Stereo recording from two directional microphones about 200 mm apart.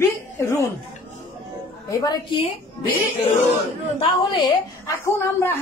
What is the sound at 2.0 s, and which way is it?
A woman's voice, 20° left (ahead or behind).